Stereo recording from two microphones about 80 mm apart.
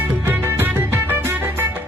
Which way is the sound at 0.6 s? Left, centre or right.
Right.